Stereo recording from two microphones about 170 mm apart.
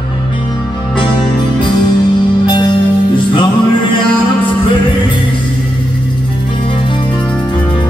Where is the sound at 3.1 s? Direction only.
30° left (ahead or behind).